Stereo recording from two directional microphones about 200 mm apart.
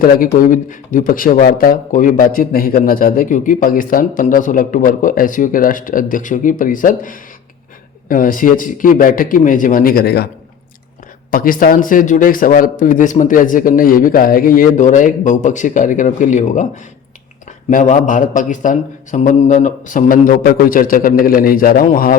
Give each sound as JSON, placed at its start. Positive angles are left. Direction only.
{"t": 0.3, "sound": "speech", "side_deg": 40}
{"t": 11.3, "sound": "a man's voice", "side_deg": 45}
{"t": 17.7, "sound": "speech", "side_deg": 40}